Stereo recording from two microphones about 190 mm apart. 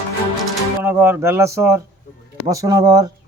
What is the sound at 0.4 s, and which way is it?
Speech, 10° right (ahead or behind).